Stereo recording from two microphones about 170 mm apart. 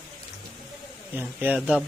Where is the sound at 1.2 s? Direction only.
10° right (ahead or behind).